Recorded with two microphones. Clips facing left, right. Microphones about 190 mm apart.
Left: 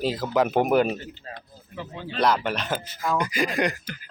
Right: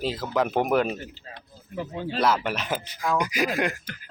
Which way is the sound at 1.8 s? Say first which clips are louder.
Right 5 dB; 45° right (ahead or behind).